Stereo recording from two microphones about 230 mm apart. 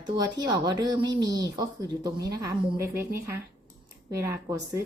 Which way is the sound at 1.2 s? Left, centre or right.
Right.